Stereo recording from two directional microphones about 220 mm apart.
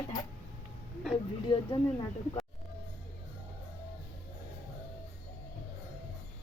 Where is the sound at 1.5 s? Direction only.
20° left (ahead or behind).